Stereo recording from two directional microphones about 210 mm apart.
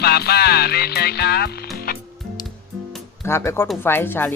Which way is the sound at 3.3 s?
10° left (ahead or behind).